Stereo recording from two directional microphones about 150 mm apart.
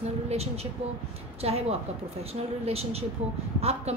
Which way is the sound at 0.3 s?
45° right (ahead or behind).